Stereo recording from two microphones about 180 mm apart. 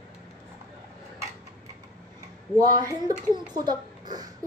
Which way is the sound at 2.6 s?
20° right (ahead or behind).